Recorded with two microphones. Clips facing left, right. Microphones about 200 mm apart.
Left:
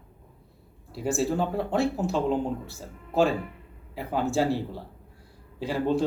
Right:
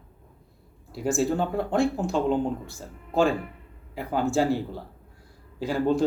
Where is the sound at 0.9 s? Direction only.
Centre (ahead or behind).